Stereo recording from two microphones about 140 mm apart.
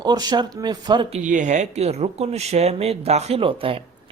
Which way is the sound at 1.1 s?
65° right (ahead or behind).